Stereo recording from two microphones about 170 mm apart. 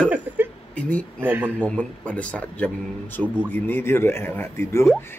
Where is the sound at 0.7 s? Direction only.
5° left (ahead or behind).